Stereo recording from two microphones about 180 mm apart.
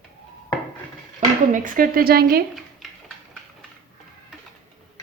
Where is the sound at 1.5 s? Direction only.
50° right (ahead or behind).